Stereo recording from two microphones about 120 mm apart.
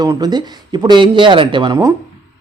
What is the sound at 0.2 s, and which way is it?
Speech, 35° right (ahead or behind).